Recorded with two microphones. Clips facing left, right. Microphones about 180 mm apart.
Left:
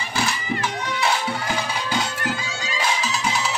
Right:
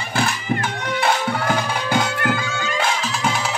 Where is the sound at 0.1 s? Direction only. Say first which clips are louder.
Right 4 dB; 55° right (ahead or behind).